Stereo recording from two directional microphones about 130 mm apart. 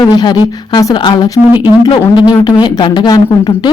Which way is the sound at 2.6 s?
35° left (ahead or behind).